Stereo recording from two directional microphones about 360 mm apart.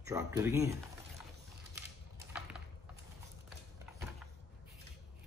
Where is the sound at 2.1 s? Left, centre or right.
Centre.